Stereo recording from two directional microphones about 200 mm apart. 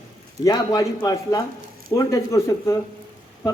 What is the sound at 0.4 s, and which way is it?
Speech, 15° left (ahead or behind).